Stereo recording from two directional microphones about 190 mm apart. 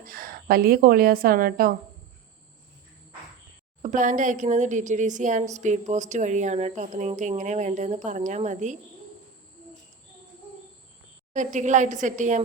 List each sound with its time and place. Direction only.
0.0 s a woman's voice: 50° right (ahead or behind)
3.8 s a woman's voice: 40° right (ahead or behind)
11.3 s a woman's voice: 40° right (ahead or behind)